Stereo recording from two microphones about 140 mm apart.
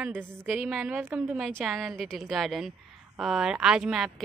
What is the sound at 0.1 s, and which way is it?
Speech, 15° right (ahead or behind).